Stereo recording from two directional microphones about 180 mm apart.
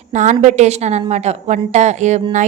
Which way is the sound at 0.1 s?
40° right (ahead or behind).